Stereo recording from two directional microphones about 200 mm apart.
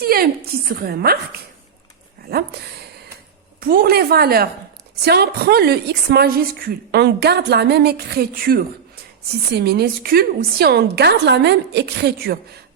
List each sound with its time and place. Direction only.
0.0 s a woman's voice: 50° right (ahead or behind)
2.3 s a woman's voice: 50° right (ahead or behind)
3.6 s a woman's voice: 45° right (ahead or behind)